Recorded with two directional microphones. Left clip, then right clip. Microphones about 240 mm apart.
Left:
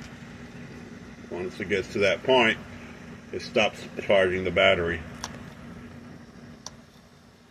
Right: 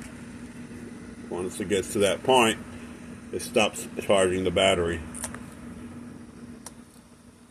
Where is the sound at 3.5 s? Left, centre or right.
Right.